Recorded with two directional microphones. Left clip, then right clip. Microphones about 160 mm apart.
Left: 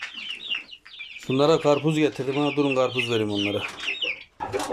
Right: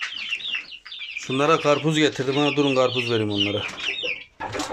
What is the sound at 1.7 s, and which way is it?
Speech, 10° left (ahead or behind).